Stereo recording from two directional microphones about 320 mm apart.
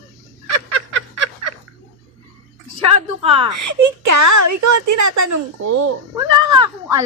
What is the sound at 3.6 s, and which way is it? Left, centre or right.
Speech, right.